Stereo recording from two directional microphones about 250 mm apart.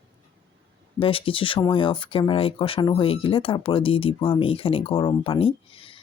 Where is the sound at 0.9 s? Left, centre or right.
Left.